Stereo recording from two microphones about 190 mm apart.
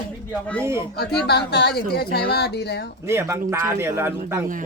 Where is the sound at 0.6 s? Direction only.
15° right (ahead or behind).